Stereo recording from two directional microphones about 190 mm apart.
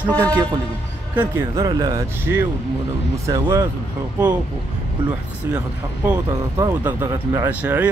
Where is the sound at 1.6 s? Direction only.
20° right (ahead or behind).